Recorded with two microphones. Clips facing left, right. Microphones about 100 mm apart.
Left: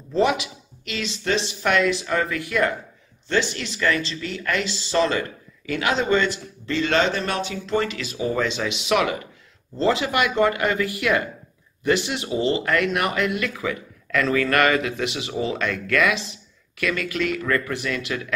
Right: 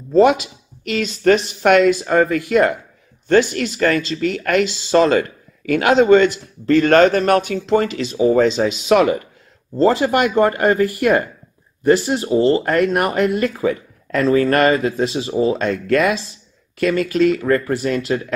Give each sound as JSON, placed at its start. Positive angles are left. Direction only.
{"t": 0.1, "sound": "speech", "side_deg": -50}
{"t": 8.0, "sound": "speech", "side_deg": -35}